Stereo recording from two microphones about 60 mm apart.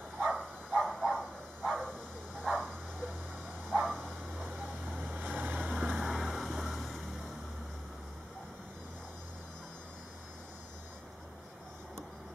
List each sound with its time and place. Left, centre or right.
0.2 s dog: centre
0.7 s bow-wow: centre
4.9 s vehicle: right
5.9 s vehicle: centre